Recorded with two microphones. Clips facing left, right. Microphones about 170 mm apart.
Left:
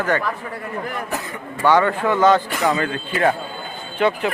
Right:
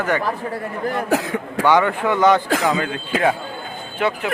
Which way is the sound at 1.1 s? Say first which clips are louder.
Right 8 dB; 90° right.